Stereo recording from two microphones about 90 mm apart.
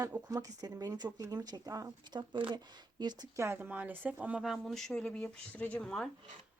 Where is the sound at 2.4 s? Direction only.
55° right (ahead or behind).